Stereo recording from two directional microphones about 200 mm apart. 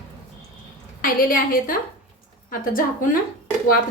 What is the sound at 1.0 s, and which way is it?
A woman's voice, 45° left (ahead or behind).